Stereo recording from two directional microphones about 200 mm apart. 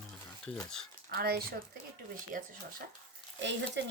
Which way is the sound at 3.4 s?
65° right (ahead or behind).